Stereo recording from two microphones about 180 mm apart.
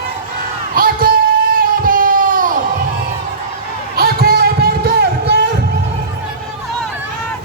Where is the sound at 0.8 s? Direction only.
55° right (ahead or behind).